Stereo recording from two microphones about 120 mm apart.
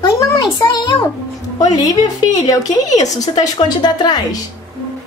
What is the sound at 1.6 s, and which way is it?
A child's voice, 30° left (ahead or behind).